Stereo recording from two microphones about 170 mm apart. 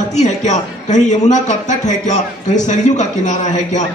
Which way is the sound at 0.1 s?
45° left (ahead or behind).